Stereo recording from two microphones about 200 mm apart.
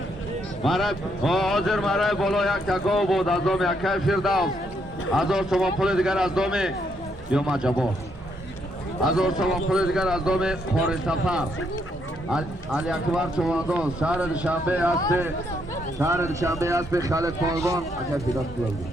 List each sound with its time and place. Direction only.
0.6 s speech: centre (ahead or behind)
9.0 s speech: centre (ahead or behind)
16.0 s speech: 15° right (ahead or behind)